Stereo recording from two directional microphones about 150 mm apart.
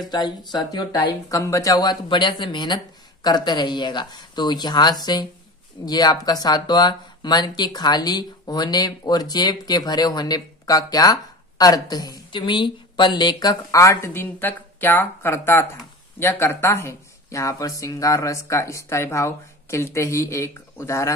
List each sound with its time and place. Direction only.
0.1 s speech: 30° left (ahead or behind)